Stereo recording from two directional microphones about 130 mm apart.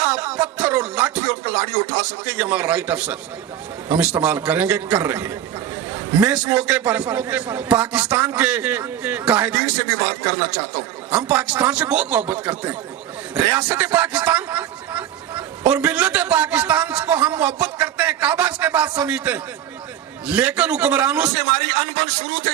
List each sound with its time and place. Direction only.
0.0 s music: 10° right (ahead or behind)
1.3 s a man's voice: 20° right (ahead or behind)
21.3 s a man's voice: 50° right (ahead or behind)
22.3 s a man's voice: 20° right (ahead or behind)